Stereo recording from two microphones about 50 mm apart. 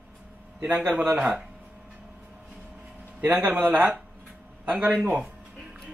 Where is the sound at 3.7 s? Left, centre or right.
Right.